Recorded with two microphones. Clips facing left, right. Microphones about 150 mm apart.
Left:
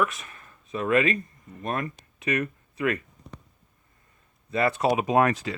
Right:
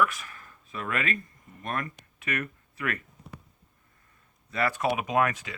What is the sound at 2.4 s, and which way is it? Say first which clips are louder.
Speech: left 7 dB; 20° left (ahead or behind).